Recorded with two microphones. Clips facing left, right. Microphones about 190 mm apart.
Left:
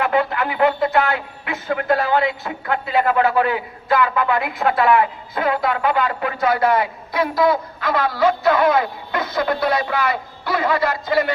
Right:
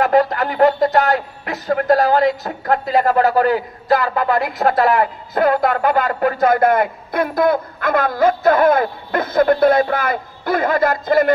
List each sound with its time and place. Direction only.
0.0 s speech: 40° right (ahead or behind)